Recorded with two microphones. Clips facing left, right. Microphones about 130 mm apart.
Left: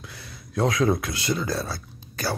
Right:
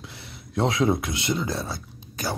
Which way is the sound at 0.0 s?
25° right (ahead or behind).